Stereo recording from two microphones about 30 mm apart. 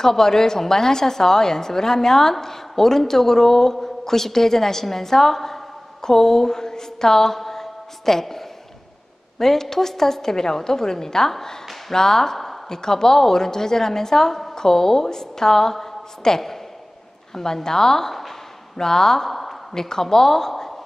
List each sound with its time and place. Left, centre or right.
0.0 s a woman's voice: centre
6.0 s mantra: centre
9.4 s a woman's voice: centre
19.2 s a sound: centre
19.7 s a woman's voice: centre